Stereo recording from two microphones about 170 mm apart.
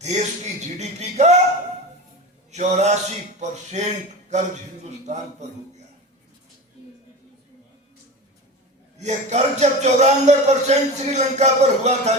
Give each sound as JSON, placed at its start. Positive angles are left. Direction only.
{"t": 0.0, "sound": "speech", "side_deg": -40}
{"t": 2.5, "sound": "a man's voice", "side_deg": -40}
{"t": 9.0, "sound": "speech", "side_deg": -40}